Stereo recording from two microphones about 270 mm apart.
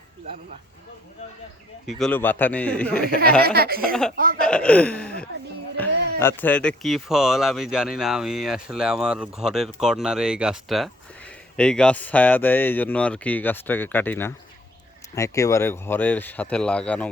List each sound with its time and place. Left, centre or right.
1.9 s speech: centre
3.4 s speech: right
4.4 s speech: centre